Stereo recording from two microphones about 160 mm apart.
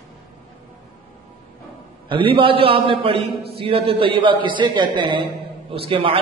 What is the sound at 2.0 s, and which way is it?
A man's voice, 35° right (ahead or behind).